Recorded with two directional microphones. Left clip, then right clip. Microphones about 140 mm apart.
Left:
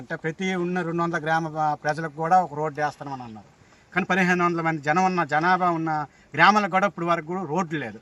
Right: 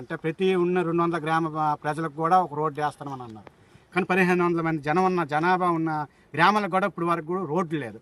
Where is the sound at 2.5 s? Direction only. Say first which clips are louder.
Right 1 dB; 20° right (ahead or behind).